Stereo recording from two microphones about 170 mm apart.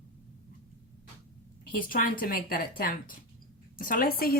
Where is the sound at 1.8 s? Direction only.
55° left (ahead or behind).